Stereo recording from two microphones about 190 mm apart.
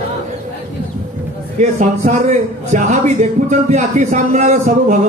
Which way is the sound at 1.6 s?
40° right (ahead or behind).